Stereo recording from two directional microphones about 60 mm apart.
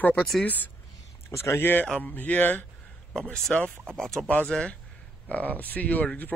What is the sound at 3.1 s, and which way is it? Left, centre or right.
Speech, centre.